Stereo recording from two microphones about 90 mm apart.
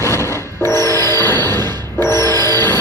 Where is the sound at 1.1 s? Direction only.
40° right (ahead or behind).